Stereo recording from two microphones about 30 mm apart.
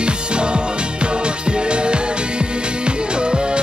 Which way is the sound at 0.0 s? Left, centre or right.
Right.